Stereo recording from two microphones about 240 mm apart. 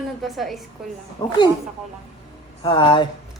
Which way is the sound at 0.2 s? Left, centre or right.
Centre.